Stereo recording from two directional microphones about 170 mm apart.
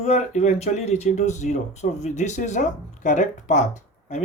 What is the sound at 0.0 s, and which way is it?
Speech, 40° left (ahead or behind).